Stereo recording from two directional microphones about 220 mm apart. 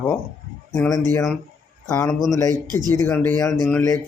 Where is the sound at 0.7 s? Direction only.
15° left (ahead or behind).